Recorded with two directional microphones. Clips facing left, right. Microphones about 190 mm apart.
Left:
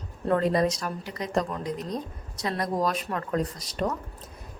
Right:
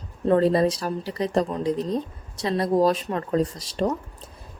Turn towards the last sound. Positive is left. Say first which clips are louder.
# right 5 dB
turn(degrees=-30)  # may be behind; listen again after turning